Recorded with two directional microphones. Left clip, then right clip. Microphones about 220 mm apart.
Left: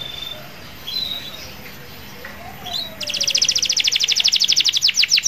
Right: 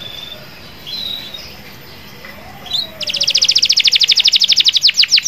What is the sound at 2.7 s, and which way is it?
Chirp, 20° right (ahead or behind).